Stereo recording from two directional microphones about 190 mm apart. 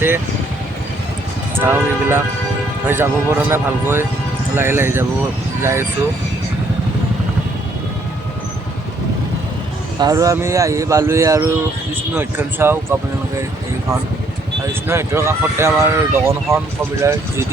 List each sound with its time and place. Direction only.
1.5 s speech: 10° right (ahead or behind)
10.0 s speech: 20° right (ahead or behind)
14.7 s speech: 15° right (ahead or behind)